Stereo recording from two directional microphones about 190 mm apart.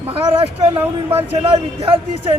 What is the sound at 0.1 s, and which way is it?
A man's voice, 30° right (ahead or behind).